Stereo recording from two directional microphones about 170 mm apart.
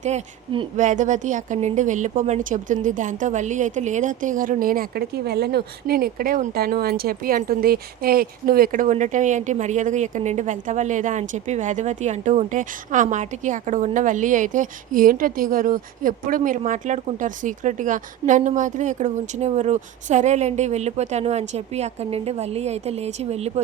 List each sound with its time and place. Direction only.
0.8 s a woman's voice: 45° right (ahead or behind)